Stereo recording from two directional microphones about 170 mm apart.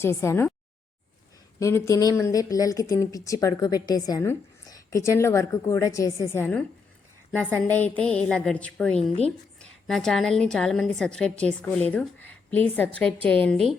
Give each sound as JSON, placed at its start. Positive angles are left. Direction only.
{"t": 0.0, "sound": "a woman's voice", "side_deg": 15}
{"t": 1.5, "sound": "a woman's voice", "side_deg": 15}